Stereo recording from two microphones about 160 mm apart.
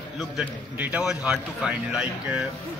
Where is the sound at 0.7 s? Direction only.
10° right (ahead or behind).